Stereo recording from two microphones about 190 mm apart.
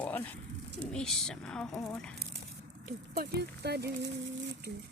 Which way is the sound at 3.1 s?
60° right (ahead or behind).